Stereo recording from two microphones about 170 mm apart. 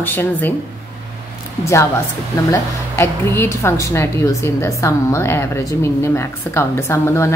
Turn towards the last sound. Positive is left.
turn(degrees=15)  # may be behind; listen again after turning